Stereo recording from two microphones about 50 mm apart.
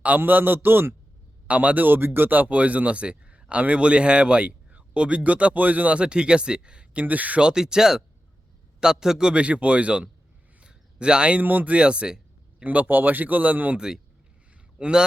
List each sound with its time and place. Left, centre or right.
0.2 s a man's voice: right
1.5 s a man's voice: right
7.0 s a man's voice: right
7.4 s a man's voice: centre
10.6 s a sound: right
11.3 s a man's voice: right
11.8 s a sound: centre
12.6 s a man's voice: right
13.7 s speech: centre